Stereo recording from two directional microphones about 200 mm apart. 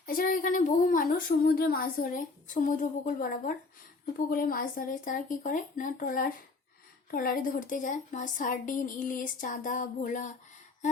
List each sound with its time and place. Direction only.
0.0 s a woman's voice: 45° left (ahead or behind)